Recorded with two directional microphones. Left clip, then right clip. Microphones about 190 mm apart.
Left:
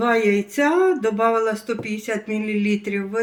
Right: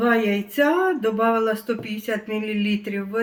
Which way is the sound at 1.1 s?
20° right (ahead or behind).